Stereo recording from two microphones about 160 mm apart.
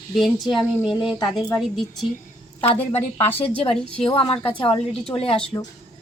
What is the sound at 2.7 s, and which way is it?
Speech, 10° left (ahead or behind).